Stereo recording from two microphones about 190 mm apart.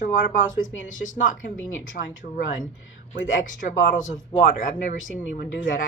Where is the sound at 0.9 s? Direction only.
40° left (ahead or behind).